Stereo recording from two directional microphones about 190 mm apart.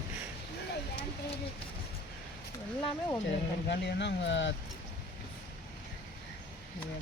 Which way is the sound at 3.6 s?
65° left (ahead or behind).